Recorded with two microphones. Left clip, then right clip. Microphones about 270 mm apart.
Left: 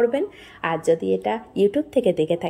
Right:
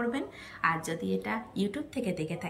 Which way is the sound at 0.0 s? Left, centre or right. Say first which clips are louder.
Left 13 dB; left.